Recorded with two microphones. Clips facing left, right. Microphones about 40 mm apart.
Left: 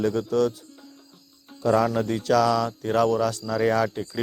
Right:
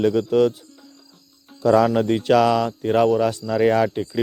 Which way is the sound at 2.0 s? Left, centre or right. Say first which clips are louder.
Right 4 dB; right.